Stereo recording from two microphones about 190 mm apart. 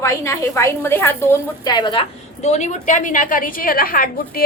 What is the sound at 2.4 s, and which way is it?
A woman's voice, 35° left (ahead or behind).